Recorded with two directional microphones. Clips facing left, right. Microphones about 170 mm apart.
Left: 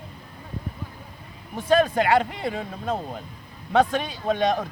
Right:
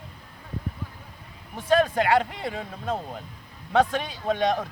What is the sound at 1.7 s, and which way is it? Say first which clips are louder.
Speech: left 1 dB; 20° left (ahead or behind).